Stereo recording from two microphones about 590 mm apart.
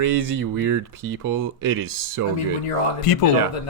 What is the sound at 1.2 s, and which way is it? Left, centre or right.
Speech, centre.